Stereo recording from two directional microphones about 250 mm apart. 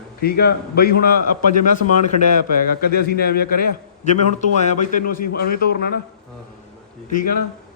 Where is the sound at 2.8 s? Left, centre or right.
Left.